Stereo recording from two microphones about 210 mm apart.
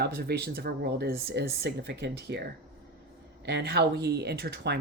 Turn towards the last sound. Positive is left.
turn(degrees=-50)  # may be behind; listen again after turning